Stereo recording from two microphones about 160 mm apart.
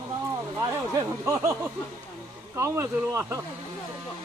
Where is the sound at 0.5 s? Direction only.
20° right (ahead or behind).